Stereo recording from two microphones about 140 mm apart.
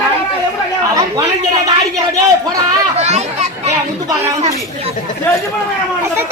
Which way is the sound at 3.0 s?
50° right (ahead or behind).